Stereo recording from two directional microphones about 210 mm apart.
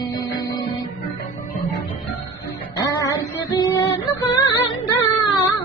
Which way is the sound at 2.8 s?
15° left (ahead or behind).